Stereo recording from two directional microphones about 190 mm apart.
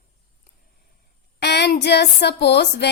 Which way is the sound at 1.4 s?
65° left (ahead or behind).